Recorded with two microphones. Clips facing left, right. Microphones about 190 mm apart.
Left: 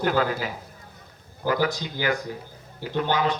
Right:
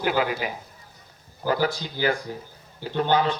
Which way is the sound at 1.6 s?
30° right (ahead or behind).